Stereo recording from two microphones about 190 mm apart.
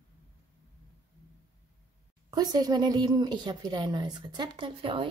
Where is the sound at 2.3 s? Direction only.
20° right (ahead or behind).